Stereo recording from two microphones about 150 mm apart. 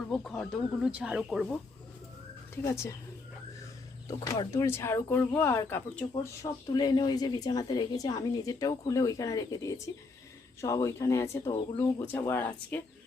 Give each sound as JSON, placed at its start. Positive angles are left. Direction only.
{"t": 0.1, "sound": "speech", "side_deg": 5}
{"t": 0.9, "sound": "speech", "side_deg": -10}
{"t": 2.6, "sound": "speech", "side_deg": 15}
{"t": 4.2, "sound": "speech", "side_deg": 20}
{"t": 6.4, "sound": "a woman's voice", "side_deg": 25}